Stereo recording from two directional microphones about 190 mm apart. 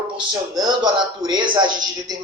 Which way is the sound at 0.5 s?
20° right (ahead or behind).